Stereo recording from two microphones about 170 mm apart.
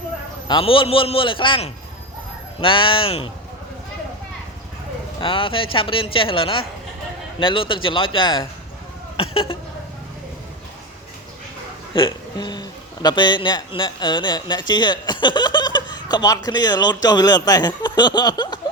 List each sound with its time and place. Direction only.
0.4 s a man's voice: 30° left (ahead or behind)
5.2 s a man's voice: 30° left (ahead or behind)
11.9 s speech: 25° left (ahead or behind)